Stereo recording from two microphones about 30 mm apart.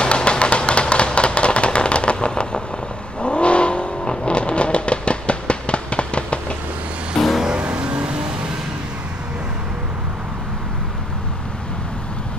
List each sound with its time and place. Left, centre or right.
0.0 s music: left
3.2 s vehicle: left
7.2 s vehicle: centre
7.8 s vehicle: right